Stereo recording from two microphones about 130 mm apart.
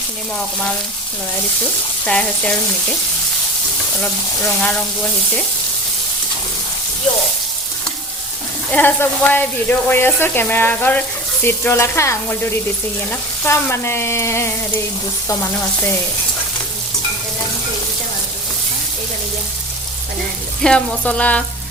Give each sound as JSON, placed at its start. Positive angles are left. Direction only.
{"t": 2.0, "sound": "speech", "side_deg": 10}
{"t": 4.0, "sound": "speech", "side_deg": 10}
{"t": 8.7, "sound": "speech", "side_deg": 15}
{"t": 11.4, "sound": "frying", "side_deg": 20}
{"t": 20.6, "sound": "speech", "side_deg": 5}